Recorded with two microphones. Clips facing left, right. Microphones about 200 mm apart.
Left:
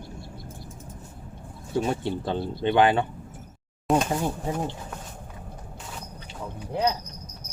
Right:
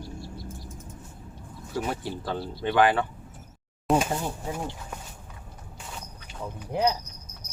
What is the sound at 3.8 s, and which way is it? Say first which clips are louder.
Speech: left 1 dB; 10° right (ahead or behind).